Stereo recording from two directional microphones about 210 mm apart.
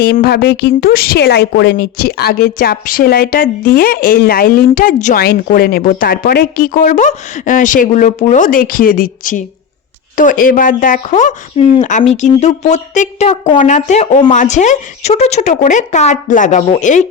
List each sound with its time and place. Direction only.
0.0 s speech: 50° left (ahead or behind)